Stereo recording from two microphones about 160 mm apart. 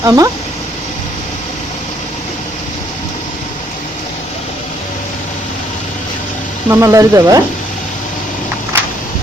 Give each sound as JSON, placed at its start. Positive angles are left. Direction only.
{"t": 0.0, "sound": "speech", "side_deg": -20}
{"t": 6.7, "sound": "speech", "side_deg": -15}